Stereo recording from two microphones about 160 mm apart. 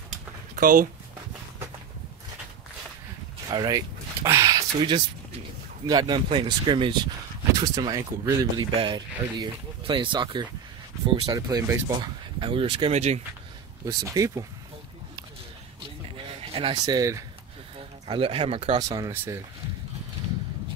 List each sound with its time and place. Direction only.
0.6 s speech: 55° right (ahead or behind)
3.4 s a sound: 25° right (ahead or behind)
5.9 s speech: 25° right (ahead or behind)
12.4 s speech: 35° right (ahead or behind)
12.9 s speech: 45° right (ahead or behind)
13.8 s speech: 20° right (ahead or behind)
16.5 s speech: 30° right (ahead or behind)
18.0 s speech: 35° right (ahead or behind)
18.9 s speech: 20° right (ahead or behind)